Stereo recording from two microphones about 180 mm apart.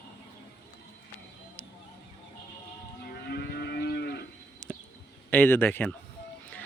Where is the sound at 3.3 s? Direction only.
60° left (ahead or behind).